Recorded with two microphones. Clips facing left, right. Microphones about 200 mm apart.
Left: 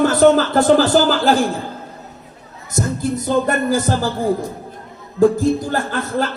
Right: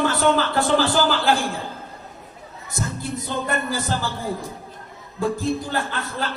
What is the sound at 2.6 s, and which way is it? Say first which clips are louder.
A man's voice: left 8 dB; 45° left (ahead or behind).